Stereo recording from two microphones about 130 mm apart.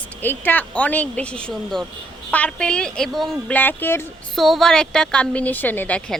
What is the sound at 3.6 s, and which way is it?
Speech, 15° left (ahead or behind).